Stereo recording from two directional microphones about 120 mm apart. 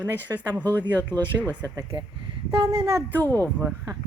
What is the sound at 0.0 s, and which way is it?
Speech, 15° right (ahead or behind).